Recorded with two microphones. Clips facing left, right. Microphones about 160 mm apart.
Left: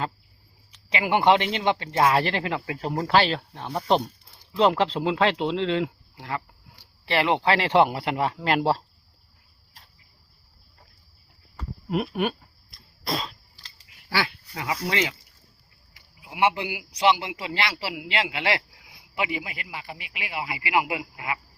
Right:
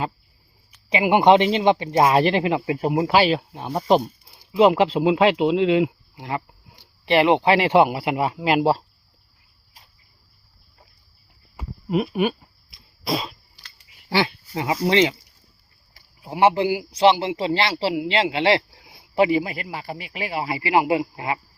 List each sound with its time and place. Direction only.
0.9 s speech: 15° right (ahead or behind)
11.5 s a sound: centre (ahead or behind)
14.5 s speech: 25° right (ahead or behind)
16.0 s a man's voice: 35° right (ahead or behind)